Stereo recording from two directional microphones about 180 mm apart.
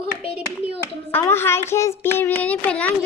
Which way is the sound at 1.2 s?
15° left (ahead or behind).